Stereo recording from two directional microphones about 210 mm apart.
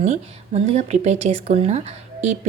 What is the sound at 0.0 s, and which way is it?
Speech, 35° right (ahead or behind).